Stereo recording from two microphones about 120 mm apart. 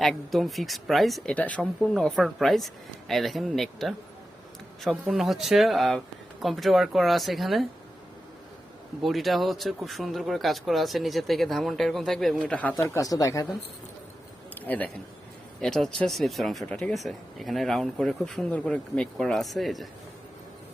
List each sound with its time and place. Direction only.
0.0 s speech: centre (ahead or behind)
9.0 s speech: centre (ahead or behind)
12.5 s speech: 15° left (ahead or behind); by 13.6 s 30° left (ahead or behind)
14.6 s a man's voice: 15° left (ahead or behind)